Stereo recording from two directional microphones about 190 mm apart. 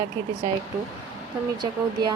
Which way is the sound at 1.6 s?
20° right (ahead or behind).